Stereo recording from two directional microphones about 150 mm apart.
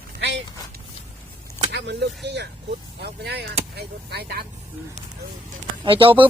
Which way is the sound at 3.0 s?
90° right.